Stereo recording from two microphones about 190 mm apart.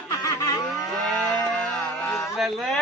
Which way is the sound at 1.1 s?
5° left (ahead or behind).